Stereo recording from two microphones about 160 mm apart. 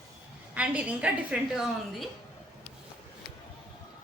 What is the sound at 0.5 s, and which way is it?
A woman's voice, 10° right (ahead or behind).